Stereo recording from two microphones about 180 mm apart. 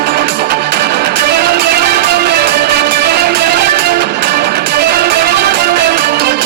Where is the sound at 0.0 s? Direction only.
60° right (ahead or behind).